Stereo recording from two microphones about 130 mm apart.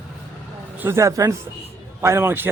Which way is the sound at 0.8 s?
20° right (ahead or behind).